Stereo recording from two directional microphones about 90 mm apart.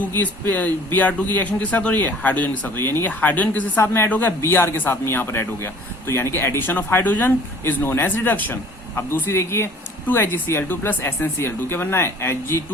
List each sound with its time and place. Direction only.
0.2 s a man's voice: 20° left (ahead or behind)